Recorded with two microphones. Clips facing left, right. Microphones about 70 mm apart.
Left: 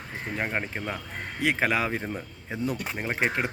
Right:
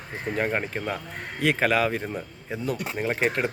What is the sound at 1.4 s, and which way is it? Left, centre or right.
Speech, centre.